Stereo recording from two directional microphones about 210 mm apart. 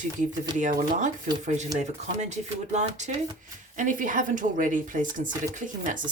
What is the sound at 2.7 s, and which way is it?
Speech, 35° right (ahead or behind).